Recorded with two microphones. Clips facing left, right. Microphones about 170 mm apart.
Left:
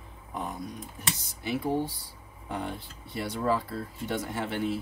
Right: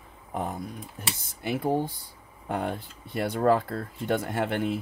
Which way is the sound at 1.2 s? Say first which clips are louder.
Right 3 dB; 55° right (ahead or behind).